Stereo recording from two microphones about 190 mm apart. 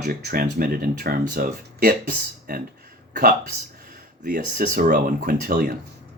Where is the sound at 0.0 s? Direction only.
50° right (ahead or behind).